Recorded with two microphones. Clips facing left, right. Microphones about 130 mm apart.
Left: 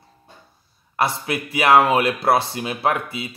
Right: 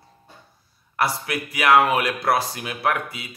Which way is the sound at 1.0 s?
25° left (ahead or behind).